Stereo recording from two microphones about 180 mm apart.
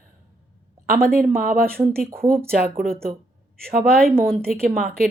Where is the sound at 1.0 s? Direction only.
55° right (ahead or behind).